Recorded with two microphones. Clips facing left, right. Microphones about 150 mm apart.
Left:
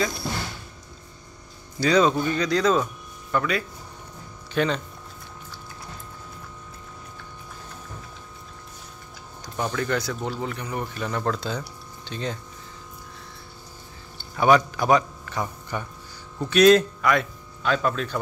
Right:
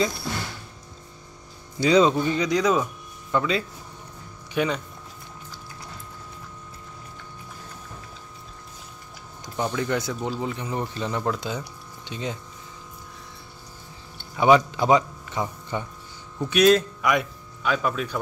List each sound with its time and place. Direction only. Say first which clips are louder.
1.8 s speech: right 1 dB; 20° right (ahead or behind)
4.6 s speech: left 1 dB; 10° right (ahead or behind)
9.6 s speech: even; 15° right (ahead or behind)
14.3 s speech: right 1 dB; 20° right (ahead or behind)
16.4 s speech: left 2 dB; 5° right (ahead or behind)